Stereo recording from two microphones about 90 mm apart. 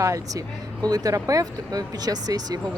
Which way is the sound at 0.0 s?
40° right (ahead or behind).